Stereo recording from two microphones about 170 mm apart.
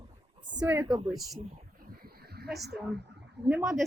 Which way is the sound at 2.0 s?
65° right (ahead or behind).